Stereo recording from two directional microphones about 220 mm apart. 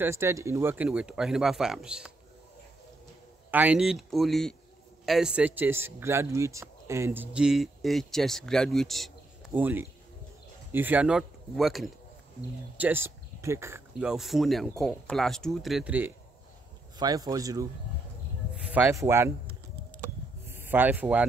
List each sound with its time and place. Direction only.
0.0 s speech: 10° right (ahead or behind)
3.5 s speech: 5° right (ahead or behind)
18.7 s speech: 10° right (ahead or behind)
20.4 s speech: 10° right (ahead or behind)